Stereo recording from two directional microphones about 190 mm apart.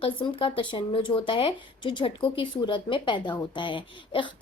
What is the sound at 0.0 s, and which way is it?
Speech, 30° left (ahead or behind).